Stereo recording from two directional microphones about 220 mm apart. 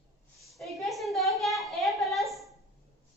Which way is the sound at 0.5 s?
Centre (ahead or behind).